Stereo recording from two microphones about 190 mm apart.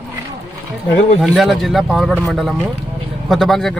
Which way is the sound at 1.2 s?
Centre (ahead or behind).